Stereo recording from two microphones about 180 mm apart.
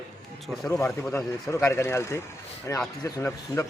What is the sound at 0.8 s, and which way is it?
A man's voice, 5° left (ahead or behind).